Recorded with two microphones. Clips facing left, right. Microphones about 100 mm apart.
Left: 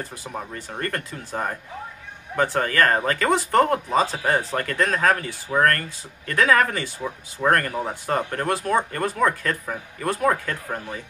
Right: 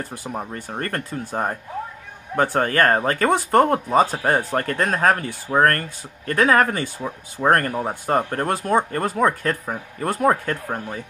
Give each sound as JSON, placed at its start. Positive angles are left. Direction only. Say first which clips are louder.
{"t": 0.1, "sound": "speech", "louder": "right 3 dB", "side_deg": -25}
{"t": 0.6, "sound": "speech", "louder": "right 2 dB", "side_deg": -45}
{"t": 4.0, "sound": "speech", "louder": "right 4 dB", "side_deg": -55}
{"t": 4.3, "sound": "speech", "louder": "right 2 dB", "side_deg": -35}